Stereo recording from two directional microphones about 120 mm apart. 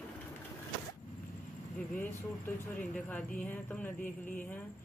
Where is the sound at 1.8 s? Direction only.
15° left (ahead or behind).